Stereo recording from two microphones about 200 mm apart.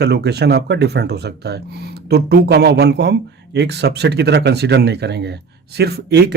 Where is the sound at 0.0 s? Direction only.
55° right (ahead or behind).